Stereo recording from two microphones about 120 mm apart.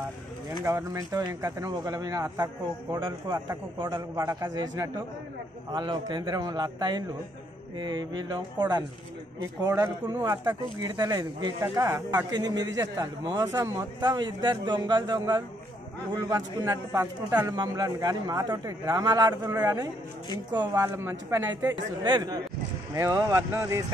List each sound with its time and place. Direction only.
0.7 s a man's voice: 25° right (ahead or behind)
10.8 s a man's voice: 35° right (ahead or behind)
20.8 s a man's voice: 25° right (ahead or behind)
22.0 s a man's voice: 35° right (ahead or behind)